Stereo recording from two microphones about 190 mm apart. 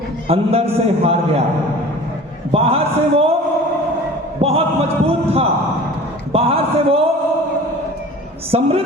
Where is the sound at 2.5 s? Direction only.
30° right (ahead or behind).